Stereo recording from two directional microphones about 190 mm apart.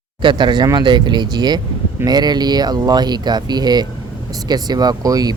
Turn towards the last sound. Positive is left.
turn(degrees=-20)  # may be behind; listen again after turning